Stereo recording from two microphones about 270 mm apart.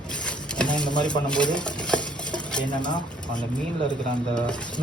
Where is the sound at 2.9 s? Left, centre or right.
Centre.